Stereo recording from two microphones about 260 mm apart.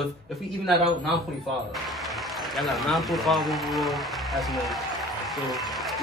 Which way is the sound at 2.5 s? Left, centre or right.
Centre.